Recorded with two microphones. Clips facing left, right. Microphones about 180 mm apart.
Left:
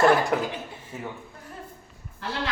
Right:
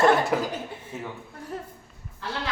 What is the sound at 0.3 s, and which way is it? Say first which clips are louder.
Speech: even; centre (ahead or behind).